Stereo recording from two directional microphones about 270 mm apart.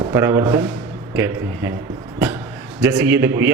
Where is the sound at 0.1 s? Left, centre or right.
Centre.